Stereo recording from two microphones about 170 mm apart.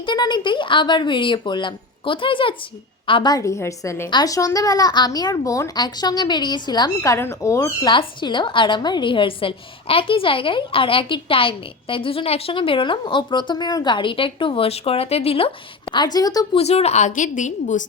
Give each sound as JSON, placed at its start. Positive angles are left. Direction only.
{"t": 0.0, "sound": "a woman's voice", "side_deg": 25}
{"t": 16.6, "sound": "a woman's voice", "side_deg": 40}